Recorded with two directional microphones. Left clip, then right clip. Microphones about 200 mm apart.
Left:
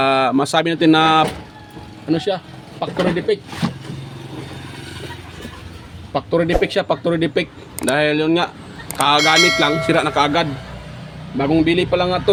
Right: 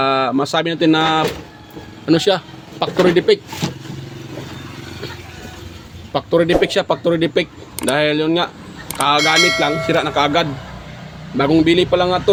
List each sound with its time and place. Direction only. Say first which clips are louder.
0.0 s speech: left 1 dB; centre (ahead or behind)
2.0 s speech: right 5 dB; 25° right (ahead or behind)
6.1 s speech: right 3 dB; 10° right (ahead or behind)
11.3 s a man's voice: right 3 dB; 15° right (ahead or behind)